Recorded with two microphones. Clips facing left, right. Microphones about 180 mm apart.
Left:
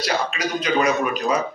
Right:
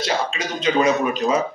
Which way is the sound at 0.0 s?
25° right (ahead or behind).